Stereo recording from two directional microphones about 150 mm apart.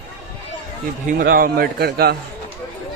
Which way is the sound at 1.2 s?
85° right.